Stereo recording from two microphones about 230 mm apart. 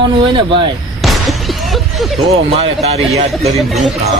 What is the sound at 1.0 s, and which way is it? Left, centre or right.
Music, centre.